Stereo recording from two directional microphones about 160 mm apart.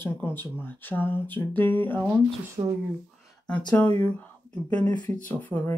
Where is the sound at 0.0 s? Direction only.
15° left (ahead or behind).